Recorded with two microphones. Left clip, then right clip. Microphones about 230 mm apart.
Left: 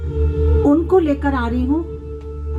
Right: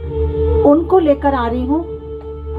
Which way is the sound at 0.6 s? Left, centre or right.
Left.